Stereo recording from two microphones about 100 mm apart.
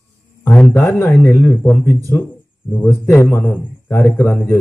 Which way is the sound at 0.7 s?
20° left (ahead or behind).